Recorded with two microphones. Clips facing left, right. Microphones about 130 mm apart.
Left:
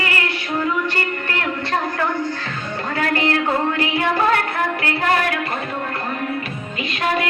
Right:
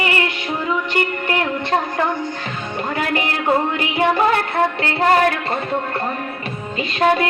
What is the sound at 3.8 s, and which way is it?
Child singing, 20° right (ahead or behind).